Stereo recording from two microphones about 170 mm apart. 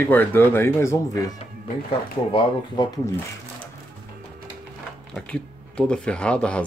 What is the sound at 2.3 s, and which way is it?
Speech, 30° left (ahead or behind).